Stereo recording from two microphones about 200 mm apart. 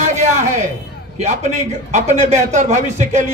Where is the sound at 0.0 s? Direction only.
40° right (ahead or behind).